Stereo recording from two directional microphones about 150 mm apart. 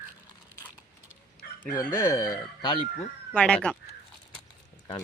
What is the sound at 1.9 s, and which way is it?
Speech, 15° left (ahead or behind).